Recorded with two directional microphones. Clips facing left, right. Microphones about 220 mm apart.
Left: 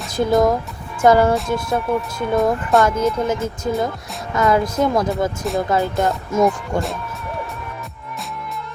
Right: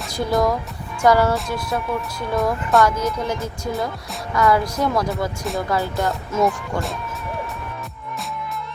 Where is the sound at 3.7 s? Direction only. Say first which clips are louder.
Left 4 dB; centre (ahead or behind).